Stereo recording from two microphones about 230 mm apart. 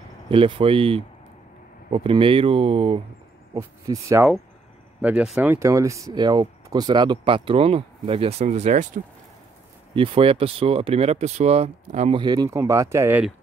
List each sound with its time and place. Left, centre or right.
0.3 s speech: right
3.5 s speech: centre